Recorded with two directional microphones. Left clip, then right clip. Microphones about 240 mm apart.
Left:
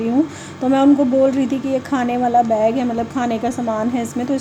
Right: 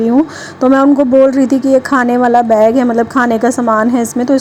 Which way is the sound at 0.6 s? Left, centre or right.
Right.